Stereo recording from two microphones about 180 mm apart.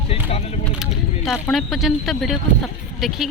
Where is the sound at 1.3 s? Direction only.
Centre (ahead or behind).